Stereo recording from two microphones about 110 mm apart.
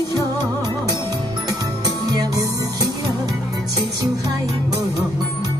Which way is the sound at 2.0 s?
35° right (ahead or behind).